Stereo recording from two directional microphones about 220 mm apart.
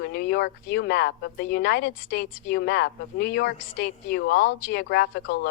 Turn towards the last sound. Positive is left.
turn(degrees=50)  # may be behind; listen again after turning